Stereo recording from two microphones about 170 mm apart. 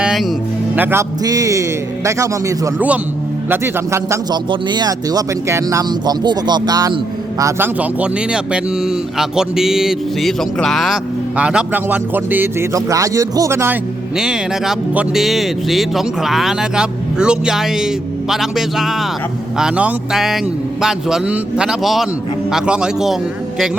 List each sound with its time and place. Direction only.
0.0 s music: centre (ahead or behind)
0.8 s speech: 15° right (ahead or behind)
14.2 s speech: 5° right (ahead or behind)